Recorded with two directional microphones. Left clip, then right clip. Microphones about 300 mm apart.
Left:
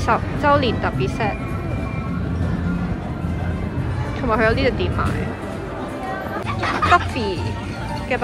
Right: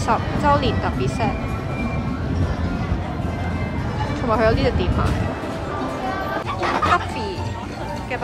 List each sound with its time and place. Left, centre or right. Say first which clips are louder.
0.0 s speech: left 1 dB; centre
4.3 s speech: left 1 dB; centre
6.6 s a sound: even; right